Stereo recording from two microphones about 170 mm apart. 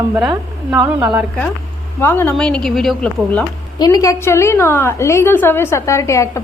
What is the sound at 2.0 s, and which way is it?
A woman's voice, 10° left (ahead or behind).